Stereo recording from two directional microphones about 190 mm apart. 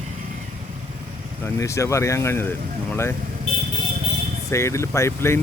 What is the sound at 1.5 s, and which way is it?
Speech, 15° left (ahead or behind).